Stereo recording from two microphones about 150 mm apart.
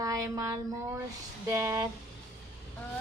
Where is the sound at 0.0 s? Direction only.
25° right (ahead or behind).